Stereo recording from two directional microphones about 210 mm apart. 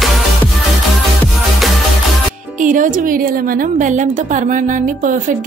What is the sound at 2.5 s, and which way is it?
A woman's voice, 40° right (ahead or behind).